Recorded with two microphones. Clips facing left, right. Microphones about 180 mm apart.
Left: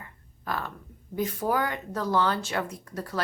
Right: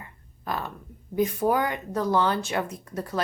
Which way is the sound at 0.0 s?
20° right (ahead or behind).